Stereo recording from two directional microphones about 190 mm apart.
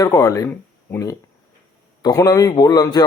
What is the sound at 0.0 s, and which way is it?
A man's voice, 15° left (ahead or behind).